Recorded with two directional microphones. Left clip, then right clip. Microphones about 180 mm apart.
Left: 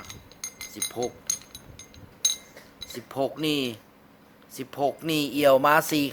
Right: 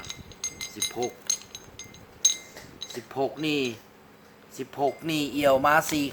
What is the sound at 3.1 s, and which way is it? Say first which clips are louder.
Speech: left 1 dB; 60° left (ahead or behind).